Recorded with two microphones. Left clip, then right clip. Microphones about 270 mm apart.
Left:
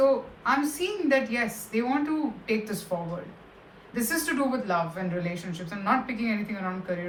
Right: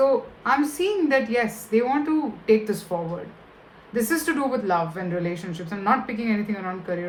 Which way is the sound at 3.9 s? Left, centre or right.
Right.